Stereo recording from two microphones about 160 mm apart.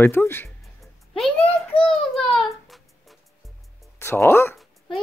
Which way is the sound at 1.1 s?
Centre (ahead or behind).